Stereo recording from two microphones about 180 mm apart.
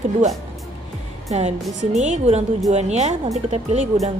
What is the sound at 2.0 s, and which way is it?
A woman's voice, 40° right (ahead or behind).